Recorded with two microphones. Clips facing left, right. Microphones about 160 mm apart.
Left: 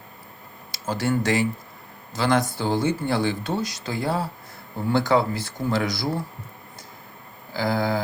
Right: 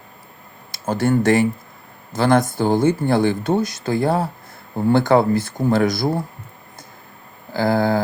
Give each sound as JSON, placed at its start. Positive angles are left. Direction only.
{"t": 0.7, "sound": "speech", "side_deg": -50}
{"t": 7.5, "sound": "speech", "side_deg": -55}